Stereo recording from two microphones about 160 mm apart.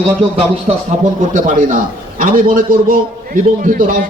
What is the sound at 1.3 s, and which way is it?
A man's voice, 55° right (ahead or behind).